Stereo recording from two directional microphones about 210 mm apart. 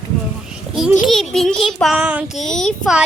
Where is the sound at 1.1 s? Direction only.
Centre (ahead or behind).